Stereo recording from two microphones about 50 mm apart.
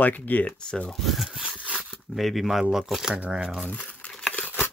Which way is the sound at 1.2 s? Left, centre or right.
Centre.